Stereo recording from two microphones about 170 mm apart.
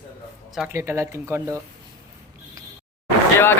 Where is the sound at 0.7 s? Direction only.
15° right (ahead or behind).